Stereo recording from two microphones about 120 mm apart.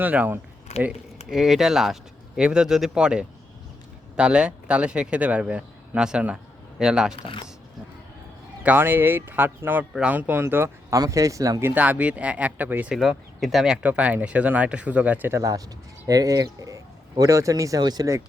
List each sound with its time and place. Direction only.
0.0 s speech: 15° right (ahead or behind)
0.7 s speech: 70° left (ahead or behind)
1.3 s speech: 5° right (ahead or behind)
8.6 s speech: 15° right (ahead or behind)
11.7 s speech: 10° right (ahead or behind)
13.0 s speech: centre (ahead or behind)
13.8 s speech: 10° right (ahead or behind)
15.4 s speech: 30° right (ahead or behind)